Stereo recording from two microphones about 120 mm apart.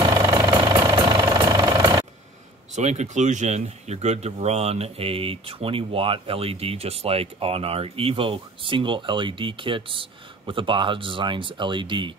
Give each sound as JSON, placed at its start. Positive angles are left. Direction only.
{"t": 0.1, "sound": "vehicle", "side_deg": -25}
{"t": 0.5, "sound": "vehicle", "side_deg": -35}
{"t": 2.7, "sound": "speech", "side_deg": -75}